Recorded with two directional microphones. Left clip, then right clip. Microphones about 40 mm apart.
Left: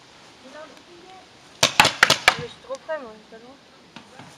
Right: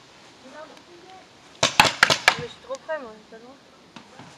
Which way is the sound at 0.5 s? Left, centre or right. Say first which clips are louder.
Left 1 dB; left.